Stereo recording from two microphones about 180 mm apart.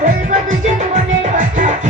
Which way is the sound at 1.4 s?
45° right (ahead or behind).